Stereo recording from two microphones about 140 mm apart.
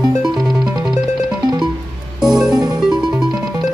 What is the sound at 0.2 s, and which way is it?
Music, centre (ahead or behind).